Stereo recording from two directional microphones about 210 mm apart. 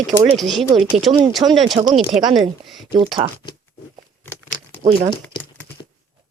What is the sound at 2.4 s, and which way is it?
Speech, centre (ahead or behind).